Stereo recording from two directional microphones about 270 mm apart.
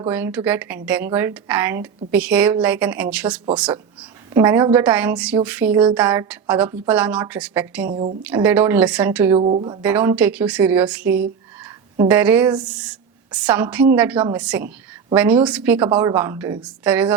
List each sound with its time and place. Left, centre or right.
0.1 s a woman's voice: centre
7.9 s speech: right
8.2 s a woman's voice: centre
9.4 s speech: right
9.8 s a woman's voice: centre